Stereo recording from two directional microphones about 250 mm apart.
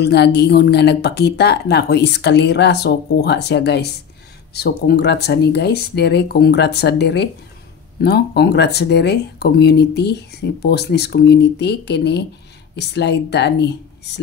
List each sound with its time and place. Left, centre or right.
0.0 s speech: left